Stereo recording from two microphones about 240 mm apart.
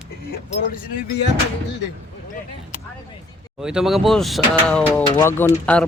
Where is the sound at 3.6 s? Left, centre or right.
Centre.